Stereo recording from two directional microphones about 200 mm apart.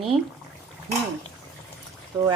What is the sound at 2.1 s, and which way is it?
Speech, 15° right (ahead or behind).